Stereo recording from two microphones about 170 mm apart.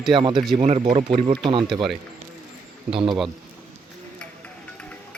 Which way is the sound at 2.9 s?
30° right (ahead or behind).